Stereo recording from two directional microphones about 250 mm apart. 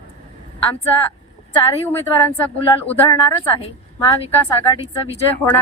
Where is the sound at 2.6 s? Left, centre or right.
Centre.